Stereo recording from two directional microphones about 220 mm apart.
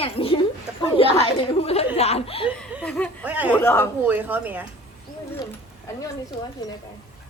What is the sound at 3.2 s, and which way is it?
Speech, 5° right (ahead or behind).